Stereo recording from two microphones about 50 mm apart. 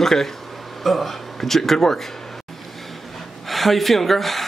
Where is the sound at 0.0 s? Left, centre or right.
Centre.